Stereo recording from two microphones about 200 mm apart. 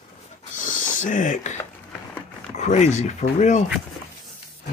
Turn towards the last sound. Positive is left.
turn(degrees=35)  # may be behind; listen again after turning